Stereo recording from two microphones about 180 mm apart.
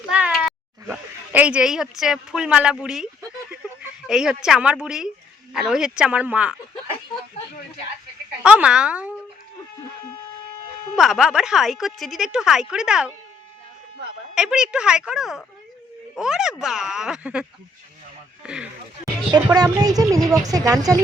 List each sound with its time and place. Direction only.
0.1 s a sound: 5° right (ahead or behind)
0.9 s a woman's voice: 10° right (ahead or behind)
3.2 s a sound: 10° right (ahead or behind)
5.5 s a woman's voice: 5° right (ahead or behind)
8.4 s a woman's voice: 5° right (ahead or behind)
10.9 s a woman's voice: centre (ahead or behind)
14.3 s a woman's voice: 5° right (ahead or behind)
18.4 s a woman's voice: 5° right (ahead or behind)
19.5 s a woman's voice: 20° right (ahead or behind)